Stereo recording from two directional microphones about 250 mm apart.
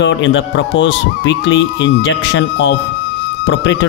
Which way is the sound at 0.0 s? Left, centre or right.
Left.